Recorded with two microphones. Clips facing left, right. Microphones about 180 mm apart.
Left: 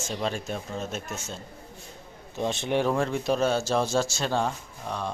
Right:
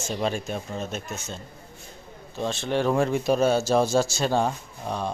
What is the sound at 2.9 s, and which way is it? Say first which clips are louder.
Speech: right 3 dB; 10° right (ahead or behind).